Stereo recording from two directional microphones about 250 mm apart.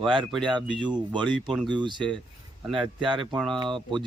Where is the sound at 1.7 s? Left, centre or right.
Centre.